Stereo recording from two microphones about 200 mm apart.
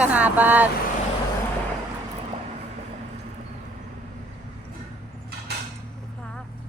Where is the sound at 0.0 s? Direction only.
5° right (ahead or behind).